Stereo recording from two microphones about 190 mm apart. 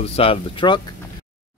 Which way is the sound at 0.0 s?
30° left (ahead or behind).